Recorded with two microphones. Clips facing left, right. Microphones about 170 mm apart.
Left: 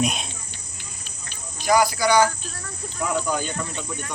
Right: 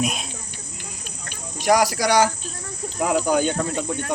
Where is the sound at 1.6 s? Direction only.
75° right (ahead or behind).